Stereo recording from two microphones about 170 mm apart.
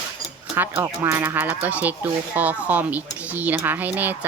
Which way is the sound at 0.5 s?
10° right (ahead or behind).